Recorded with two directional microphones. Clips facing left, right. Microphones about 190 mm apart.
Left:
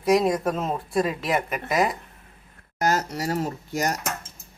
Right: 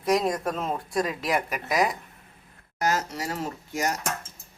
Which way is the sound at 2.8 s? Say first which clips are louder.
Left 3 dB; 40° left (ahead or behind).